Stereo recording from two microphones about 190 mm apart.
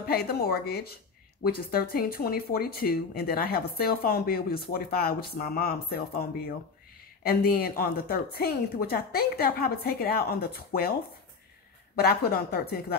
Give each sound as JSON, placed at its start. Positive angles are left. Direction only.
{"t": 0.1, "sound": "speech", "side_deg": 55}